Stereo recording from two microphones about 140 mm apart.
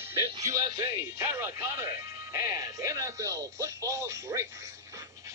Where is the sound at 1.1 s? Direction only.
20° right (ahead or behind).